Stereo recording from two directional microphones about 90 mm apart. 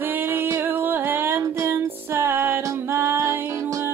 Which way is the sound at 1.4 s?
35° right (ahead or behind).